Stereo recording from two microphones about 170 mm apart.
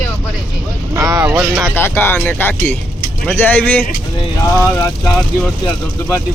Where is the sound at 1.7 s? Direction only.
15° left (ahead or behind).